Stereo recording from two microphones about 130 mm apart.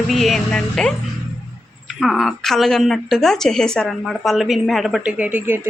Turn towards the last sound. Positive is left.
turn(degrees=-15)  # may be behind; listen again after turning